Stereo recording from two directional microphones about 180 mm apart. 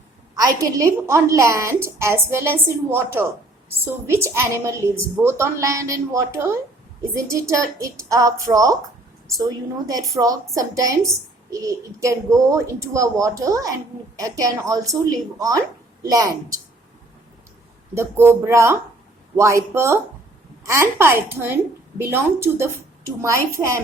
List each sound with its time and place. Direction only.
0.3 s a woman's voice: 20° right (ahead or behind)
17.9 s a woman's voice: 15° right (ahead or behind)